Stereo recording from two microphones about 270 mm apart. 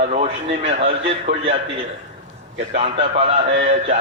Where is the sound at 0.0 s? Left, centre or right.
Right.